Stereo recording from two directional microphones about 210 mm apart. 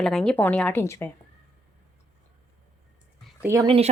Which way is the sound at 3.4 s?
15° right (ahead or behind).